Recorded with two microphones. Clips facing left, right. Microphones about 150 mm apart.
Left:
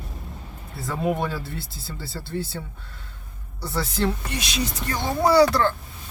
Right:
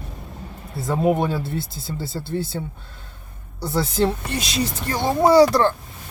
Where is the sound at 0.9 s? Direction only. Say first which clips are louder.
Right 5 dB; 25° right (ahead or behind).